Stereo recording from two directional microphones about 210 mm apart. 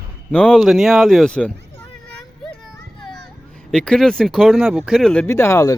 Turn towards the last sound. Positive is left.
turn(degrees=15)  # may be behind; listen again after turning